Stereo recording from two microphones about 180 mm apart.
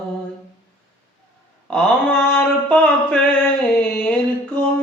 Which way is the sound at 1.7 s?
5° left (ahead or behind).